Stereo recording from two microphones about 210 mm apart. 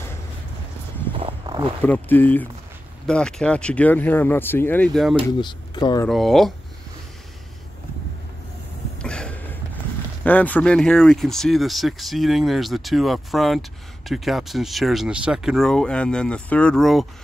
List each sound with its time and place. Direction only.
1.1 s walk: 25° right (ahead or behind)
1.9 s speech: 10° left (ahead or behind)
5.4 s speech: 20° left (ahead or behind)
6.0 s speech: centre (ahead or behind)
9.0 s a sound: 5° left (ahead or behind)
10.2 s speech: 5° left (ahead or behind)